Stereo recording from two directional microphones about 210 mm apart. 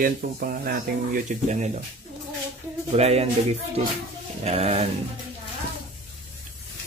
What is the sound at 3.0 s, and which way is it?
Speech, 30° right (ahead or behind).